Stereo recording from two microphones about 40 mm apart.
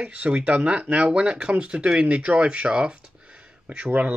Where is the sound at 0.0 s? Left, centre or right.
Right.